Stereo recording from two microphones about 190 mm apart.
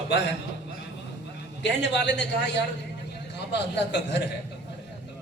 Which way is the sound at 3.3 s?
65° left (ahead or behind).